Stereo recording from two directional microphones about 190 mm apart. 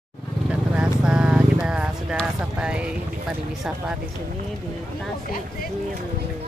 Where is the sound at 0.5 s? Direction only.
5° right (ahead or behind).